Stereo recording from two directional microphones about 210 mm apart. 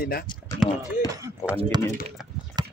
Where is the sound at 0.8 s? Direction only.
15° right (ahead or behind).